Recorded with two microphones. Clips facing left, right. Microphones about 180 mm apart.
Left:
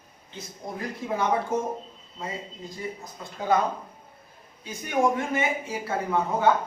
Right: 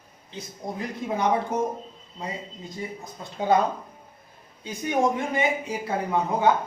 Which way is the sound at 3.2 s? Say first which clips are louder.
Right 1 dB; 30° right (ahead or behind).